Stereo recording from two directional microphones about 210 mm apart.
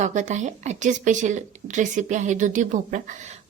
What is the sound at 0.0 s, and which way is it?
A woman's voice, 35° right (ahead or behind).